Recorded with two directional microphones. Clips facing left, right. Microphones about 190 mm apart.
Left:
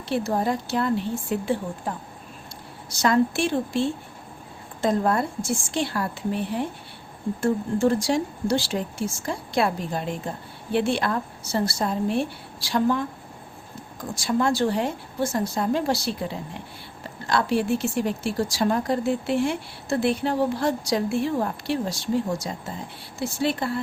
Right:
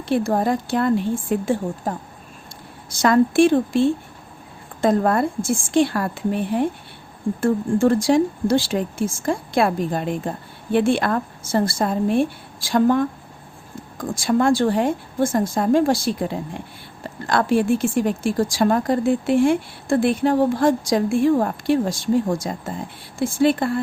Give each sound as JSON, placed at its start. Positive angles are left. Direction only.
{"t": 0.1, "sound": "speech", "side_deg": -50}
{"t": 14.1, "sound": "speech", "side_deg": -50}